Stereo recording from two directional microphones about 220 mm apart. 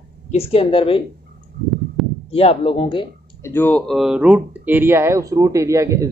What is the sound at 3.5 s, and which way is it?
Speech, 10° left (ahead or behind).